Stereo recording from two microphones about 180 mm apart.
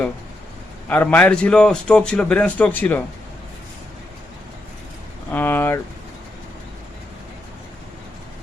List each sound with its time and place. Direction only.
0.9 s a man's voice: 10° left (ahead or behind)
5.3 s vehicle: 10° left (ahead or behind)